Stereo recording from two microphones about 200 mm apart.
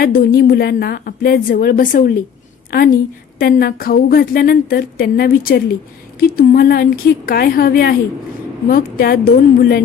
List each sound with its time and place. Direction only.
0.0 s a woman's voice: 45° left (ahead or behind)